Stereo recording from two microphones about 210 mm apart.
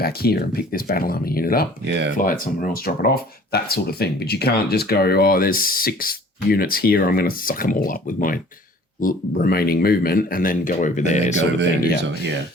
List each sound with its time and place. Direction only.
0.0 s speech: 45° left (ahead or behind)
1.9 s speech: 55° right (ahead or behind)
2.1 s speech: 40° left (ahead or behind)